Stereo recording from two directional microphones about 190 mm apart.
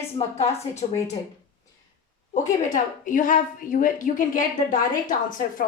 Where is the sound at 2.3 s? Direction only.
45° left (ahead or behind).